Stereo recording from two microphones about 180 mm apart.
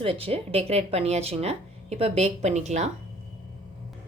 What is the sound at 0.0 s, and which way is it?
A woman's voice, 30° right (ahead or behind).